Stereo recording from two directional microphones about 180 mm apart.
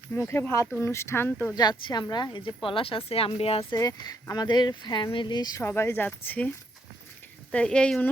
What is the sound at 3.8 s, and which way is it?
Speech, 20° left (ahead or behind).